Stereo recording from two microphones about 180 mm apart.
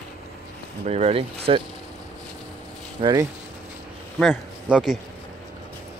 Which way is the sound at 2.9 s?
25° right (ahead or behind).